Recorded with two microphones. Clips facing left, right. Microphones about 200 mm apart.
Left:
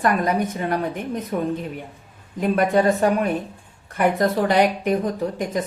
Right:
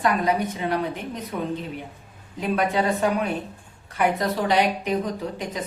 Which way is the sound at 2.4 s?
50° left (ahead or behind).